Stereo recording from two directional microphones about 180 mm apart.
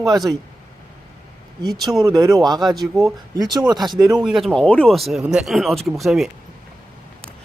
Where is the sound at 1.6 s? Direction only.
Centre (ahead or behind).